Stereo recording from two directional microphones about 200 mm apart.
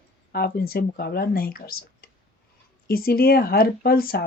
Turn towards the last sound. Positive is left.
turn(degrees=50)  # may be behind; listen again after turning